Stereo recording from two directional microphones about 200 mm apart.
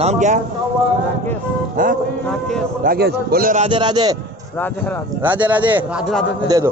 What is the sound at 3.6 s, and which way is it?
Speech, 25° right (ahead or behind).